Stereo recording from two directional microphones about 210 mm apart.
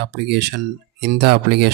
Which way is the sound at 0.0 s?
50° right (ahead or behind).